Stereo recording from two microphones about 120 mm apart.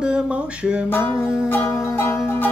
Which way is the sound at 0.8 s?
20° left (ahead or behind).